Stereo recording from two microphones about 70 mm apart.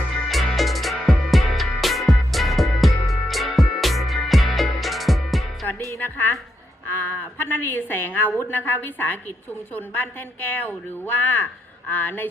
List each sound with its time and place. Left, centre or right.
0.3 s music: centre
6.0 s music: left
6.9 s a woman's voice: left